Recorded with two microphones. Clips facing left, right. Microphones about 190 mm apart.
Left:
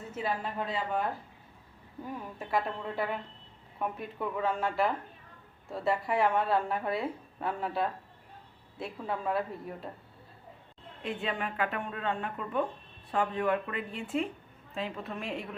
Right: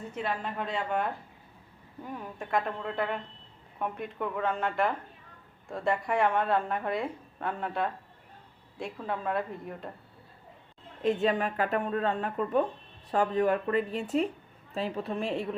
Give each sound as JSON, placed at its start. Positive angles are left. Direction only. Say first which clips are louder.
{"t": 0.1, "sound": "a woman's voice", "louder": "left 1 dB", "side_deg": 5}
{"t": 2.4, "sound": "a woman's voice", "louder": "right 1 dB", "side_deg": 5}
{"t": 11.0, "sound": "speech", "louder": "right 8 dB", "side_deg": -40}